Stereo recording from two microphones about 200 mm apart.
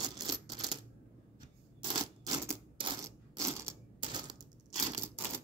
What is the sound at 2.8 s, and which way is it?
Coin, 20° right (ahead or behind).